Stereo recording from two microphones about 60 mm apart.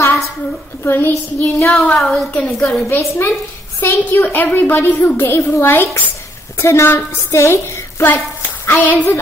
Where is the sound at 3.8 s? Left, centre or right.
Left.